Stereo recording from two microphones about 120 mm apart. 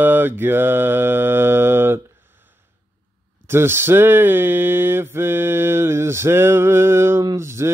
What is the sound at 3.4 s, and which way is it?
Mantra, 20° right (ahead or behind).